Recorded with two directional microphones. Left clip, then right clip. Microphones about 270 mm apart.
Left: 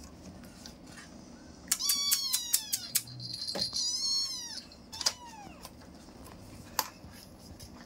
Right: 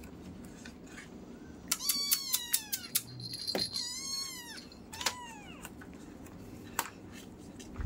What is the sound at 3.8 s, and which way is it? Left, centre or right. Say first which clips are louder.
Cat: left 7 dB; centre.